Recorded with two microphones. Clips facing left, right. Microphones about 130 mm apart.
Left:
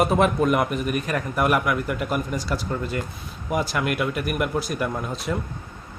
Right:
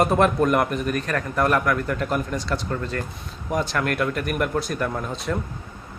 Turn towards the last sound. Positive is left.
turn(degrees=5)  # may be behind; listen again after turning